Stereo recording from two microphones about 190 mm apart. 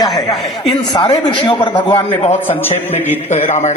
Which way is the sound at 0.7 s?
25° left (ahead or behind).